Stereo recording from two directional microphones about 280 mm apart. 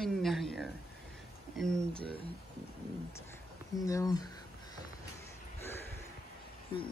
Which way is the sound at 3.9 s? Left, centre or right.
Centre.